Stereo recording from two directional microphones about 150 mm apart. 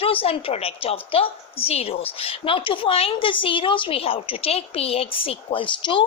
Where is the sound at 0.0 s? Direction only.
40° left (ahead or behind).